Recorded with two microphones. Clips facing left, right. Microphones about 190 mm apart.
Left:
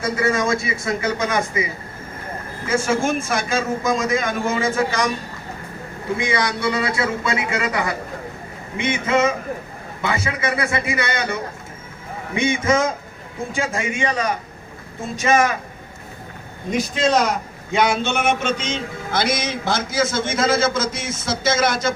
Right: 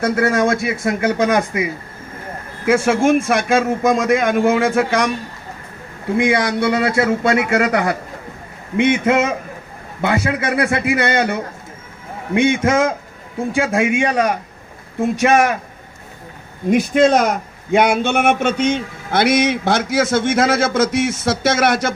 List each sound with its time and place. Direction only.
0.0 s a man's voice: 65° right (ahead or behind)
6.1 s a man's voice: 60° right (ahead or behind)
16.7 s a man's voice: 55° right (ahead or behind)